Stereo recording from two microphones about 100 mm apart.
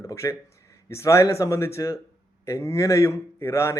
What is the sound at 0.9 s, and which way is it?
Speech, 30° left (ahead or behind).